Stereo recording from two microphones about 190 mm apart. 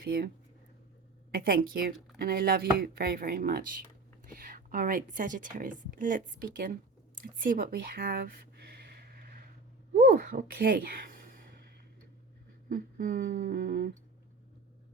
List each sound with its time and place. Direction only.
0.0 s speech: 55° right (ahead or behind)
1.3 s speech: 50° right (ahead or behind)
10.0 s speech: 45° right (ahead or behind)
12.6 s speech: 45° right (ahead or behind)